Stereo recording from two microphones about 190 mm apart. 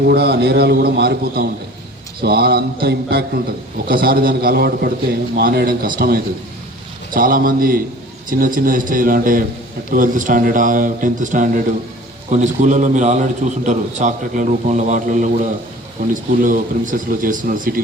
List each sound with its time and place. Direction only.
0.0 s a man's voice: 55° right (ahead or behind)